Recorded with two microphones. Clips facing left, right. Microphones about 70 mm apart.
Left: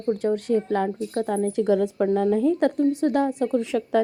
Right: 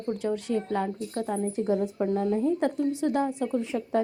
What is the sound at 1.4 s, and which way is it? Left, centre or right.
A woman's voice, left.